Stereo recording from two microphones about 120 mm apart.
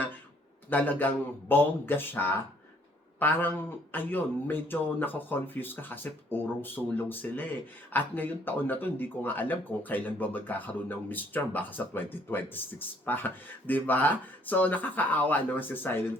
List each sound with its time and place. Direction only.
0.7 s speech: 15° left (ahead or behind)